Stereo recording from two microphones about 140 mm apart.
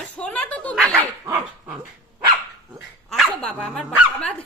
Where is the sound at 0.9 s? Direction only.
15° right (ahead or behind).